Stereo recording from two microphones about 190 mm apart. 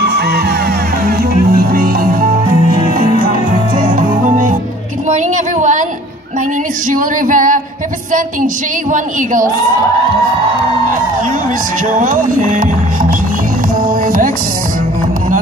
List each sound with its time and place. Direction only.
0.0 s music: 60° right (ahead or behind)
3.7 s music: 45° right (ahead or behind)
5.1 s a sound: 40° right (ahead or behind)
6.9 s music: 45° right (ahead or behind)
8.9 s speech: 45° right (ahead or behind)
12.0 s speech: 45° right (ahead or behind)
13.8 s music: 45° right (ahead or behind)